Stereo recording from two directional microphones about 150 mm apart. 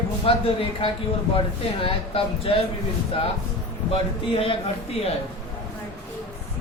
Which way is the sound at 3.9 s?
40° left (ahead or behind).